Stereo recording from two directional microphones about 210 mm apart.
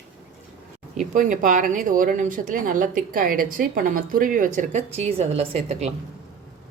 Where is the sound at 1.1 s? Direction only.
40° right (ahead or behind).